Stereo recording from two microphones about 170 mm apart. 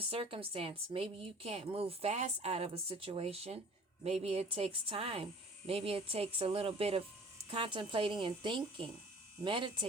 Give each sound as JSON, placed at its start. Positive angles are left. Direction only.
{"t": 0.0, "sound": "a woman's voice", "side_deg": -35}